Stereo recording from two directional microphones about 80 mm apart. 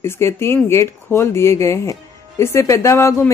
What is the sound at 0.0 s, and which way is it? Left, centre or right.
Speech, left.